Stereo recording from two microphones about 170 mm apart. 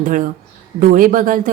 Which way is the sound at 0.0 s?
50° right (ahead or behind).